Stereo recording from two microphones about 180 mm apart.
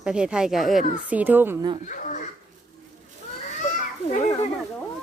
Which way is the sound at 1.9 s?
45° left (ahead or behind).